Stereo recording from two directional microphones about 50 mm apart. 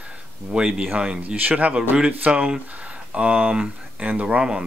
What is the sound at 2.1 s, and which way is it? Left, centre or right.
Speech, right.